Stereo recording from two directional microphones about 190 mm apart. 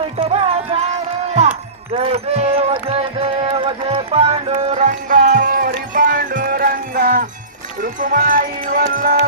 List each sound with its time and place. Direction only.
0.0 s music: 30° right (ahead or behind); by 9.1 s 45° right (ahead or behind)